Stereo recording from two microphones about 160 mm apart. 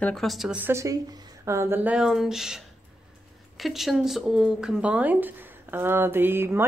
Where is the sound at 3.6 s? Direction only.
Centre (ahead or behind).